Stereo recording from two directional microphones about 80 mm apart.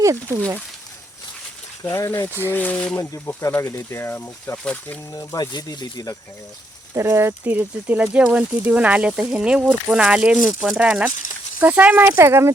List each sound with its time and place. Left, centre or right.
0.0 s speech: right
1.8 s speech: left
2.5 s speech: left
3.3 s speech: left
4.5 s speech: centre
5.1 s speech: left
5.5 s speech: left
6.9 s speech: right